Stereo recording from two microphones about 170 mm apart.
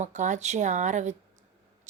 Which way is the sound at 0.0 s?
45° right (ahead or behind).